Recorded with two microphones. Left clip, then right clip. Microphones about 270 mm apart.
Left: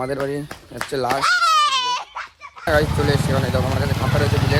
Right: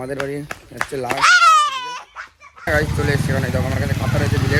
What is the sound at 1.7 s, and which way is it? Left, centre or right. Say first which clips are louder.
Baby cry: left 5 dB; centre.